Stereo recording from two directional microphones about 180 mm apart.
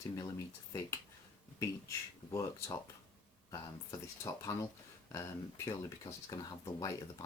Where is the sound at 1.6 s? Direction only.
15° left (ahead or behind).